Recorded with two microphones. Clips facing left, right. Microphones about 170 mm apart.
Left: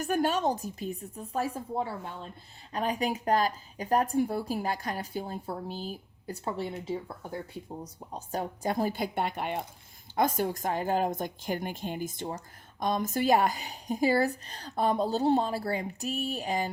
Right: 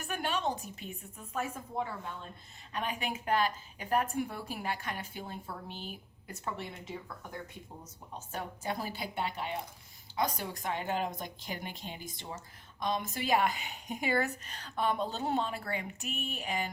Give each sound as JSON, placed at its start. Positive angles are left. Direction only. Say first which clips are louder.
{"t": 0.0, "sound": "a woman's voice", "louder": "left 7 dB", "side_deg": 40}